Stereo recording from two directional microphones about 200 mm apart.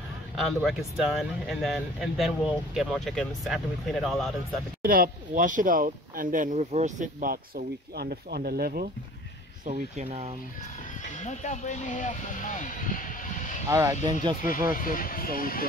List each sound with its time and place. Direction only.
0.4 s speech: centre (ahead or behind)
4.8 s speech: 45° right (ahead or behind)
9.7 s speech: 35° right (ahead or behind)
11.1 s speech: 35° left (ahead or behind)
13.7 s speech: 15° right (ahead or behind)
14.8 s speech: 45° left (ahead or behind)